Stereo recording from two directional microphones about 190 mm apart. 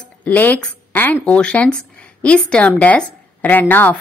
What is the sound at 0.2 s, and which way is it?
Speech, 10° left (ahead or behind).